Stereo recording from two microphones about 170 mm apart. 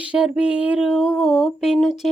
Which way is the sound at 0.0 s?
10° right (ahead or behind).